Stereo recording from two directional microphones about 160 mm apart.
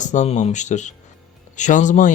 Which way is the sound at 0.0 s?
50° left (ahead or behind).